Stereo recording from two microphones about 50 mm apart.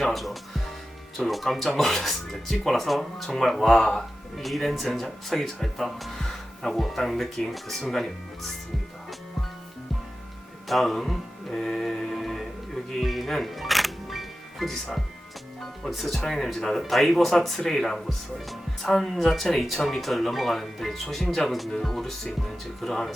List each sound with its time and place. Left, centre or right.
0.0 s speech: centre
3.7 s speech: centre
4.4 s speech: centre
10.7 s music: centre
15.8 s speech: centre